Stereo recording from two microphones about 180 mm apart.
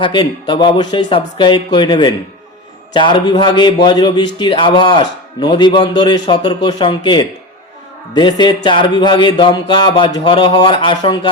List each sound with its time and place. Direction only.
0.0 s speech: 25° left (ahead or behind)